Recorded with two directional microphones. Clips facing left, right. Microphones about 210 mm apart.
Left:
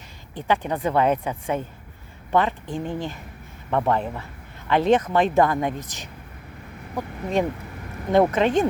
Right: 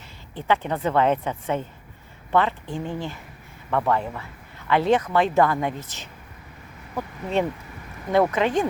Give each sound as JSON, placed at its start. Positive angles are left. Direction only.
{"t": 0.3, "sound": "a woman's voice", "side_deg": 15}